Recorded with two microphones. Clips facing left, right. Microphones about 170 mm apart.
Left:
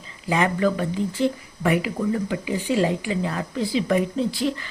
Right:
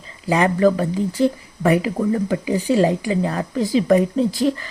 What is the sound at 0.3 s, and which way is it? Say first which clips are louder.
Speech: right 5 dB; 35° right (ahead or behind).